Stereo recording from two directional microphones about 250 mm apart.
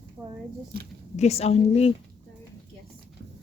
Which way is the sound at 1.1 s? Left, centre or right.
Left.